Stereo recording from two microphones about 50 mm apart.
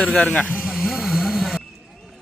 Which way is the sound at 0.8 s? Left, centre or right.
Centre.